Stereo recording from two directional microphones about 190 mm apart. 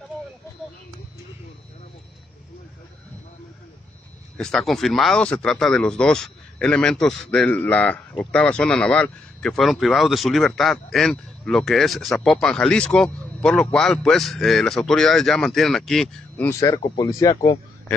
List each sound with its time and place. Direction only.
4.4 s speech: 5° left (ahead or behind)
16.4 s speech: 15° left (ahead or behind)